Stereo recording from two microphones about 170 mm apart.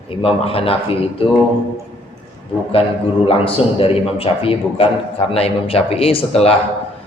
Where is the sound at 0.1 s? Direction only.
35° left (ahead or behind).